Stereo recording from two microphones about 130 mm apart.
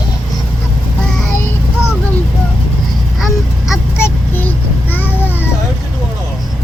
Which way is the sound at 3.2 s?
Centre (ahead or behind).